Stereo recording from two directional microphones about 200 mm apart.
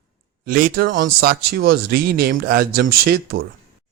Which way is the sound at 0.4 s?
45° right (ahead or behind).